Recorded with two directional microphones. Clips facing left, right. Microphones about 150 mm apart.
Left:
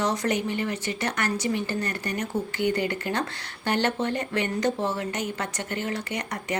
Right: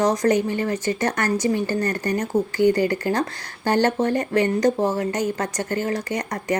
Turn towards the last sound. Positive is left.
turn(degrees=-40)  # may be behind; listen again after turning